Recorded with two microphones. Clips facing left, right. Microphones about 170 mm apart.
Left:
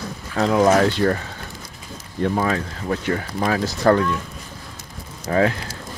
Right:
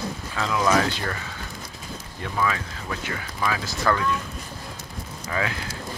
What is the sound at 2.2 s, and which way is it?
Speech, 40° left (ahead or behind).